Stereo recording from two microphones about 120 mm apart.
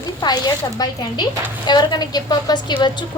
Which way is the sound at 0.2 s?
35° left (ahead or behind).